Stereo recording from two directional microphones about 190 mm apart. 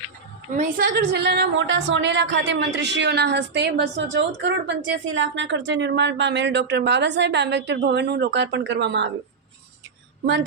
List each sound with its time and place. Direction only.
0.5 s a woman's voice: 40° right (ahead or behind)
0.9 s a woman's voice: 60° right (ahead or behind)